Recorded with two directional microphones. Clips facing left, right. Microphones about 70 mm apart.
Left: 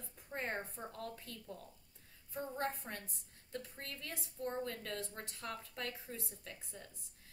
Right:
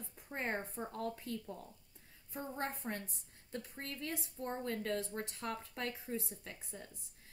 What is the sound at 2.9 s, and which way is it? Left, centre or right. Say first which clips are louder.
Speech: right 5 dB; centre.